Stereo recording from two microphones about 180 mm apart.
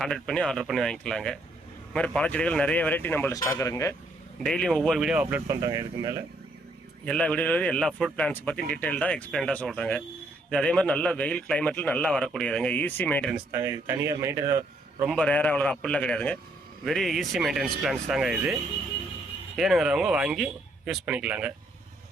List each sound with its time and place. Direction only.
0.0 s a man's voice: 5° left (ahead or behind)
4.4 s a man's voice: 5° left (ahead or behind)
5.5 s speech: 20° right (ahead or behind)
7.0 s a man's voice: 5° left (ahead or behind)
13.3 s a man's voice: 15° right (ahead or behind)
15.0 s a man's voice: 5° left (ahead or behind)